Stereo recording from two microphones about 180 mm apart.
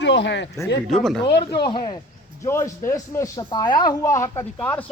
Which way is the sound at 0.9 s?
Centre (ahead or behind).